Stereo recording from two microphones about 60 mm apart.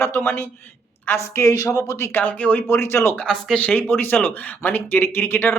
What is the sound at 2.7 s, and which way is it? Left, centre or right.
Speech, left.